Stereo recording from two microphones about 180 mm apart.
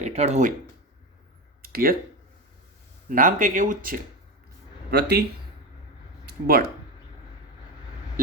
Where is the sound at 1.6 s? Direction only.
55° right (ahead or behind).